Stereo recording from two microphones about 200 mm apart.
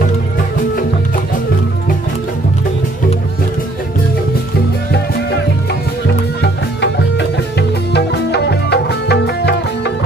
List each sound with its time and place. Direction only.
6.4 s music: 55° left (ahead or behind)